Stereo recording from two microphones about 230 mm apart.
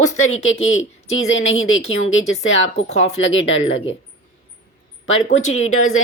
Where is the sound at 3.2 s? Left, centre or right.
Left.